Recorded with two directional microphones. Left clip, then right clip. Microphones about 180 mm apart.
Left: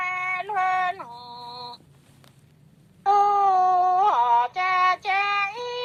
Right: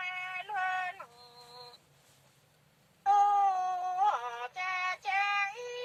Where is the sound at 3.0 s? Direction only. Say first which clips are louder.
Left 7 dB; 25° left (ahead or behind).